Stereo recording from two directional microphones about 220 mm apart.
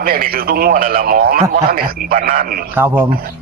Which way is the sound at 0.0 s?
40° right (ahead or behind).